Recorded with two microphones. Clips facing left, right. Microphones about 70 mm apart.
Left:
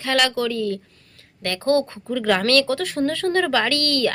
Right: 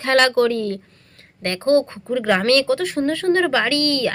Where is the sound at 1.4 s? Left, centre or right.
Right.